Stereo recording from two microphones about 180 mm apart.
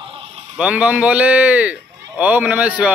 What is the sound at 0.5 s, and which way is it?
Speech, 5° right (ahead or behind).